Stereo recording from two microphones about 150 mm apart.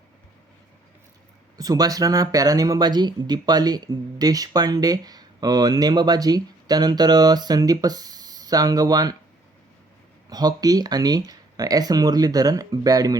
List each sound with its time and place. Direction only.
1.5 s speech: 25° right (ahead or behind)
10.2 s speech: 25° right (ahead or behind)